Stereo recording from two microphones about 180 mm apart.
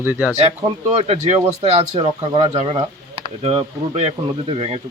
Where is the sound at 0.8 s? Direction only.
35° right (ahead or behind).